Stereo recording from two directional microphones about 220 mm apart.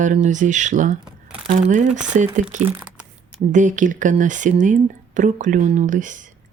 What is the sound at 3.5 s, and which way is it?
Speech, 35° right (ahead or behind).